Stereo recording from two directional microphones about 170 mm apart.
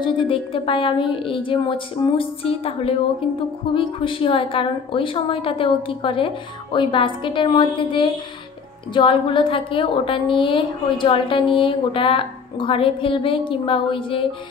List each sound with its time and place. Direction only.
0.0 s a woman's voice: 30° left (ahead or behind)